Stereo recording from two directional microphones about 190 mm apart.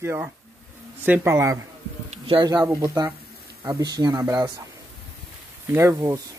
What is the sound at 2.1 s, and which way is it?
Speech, 25° right (ahead or behind).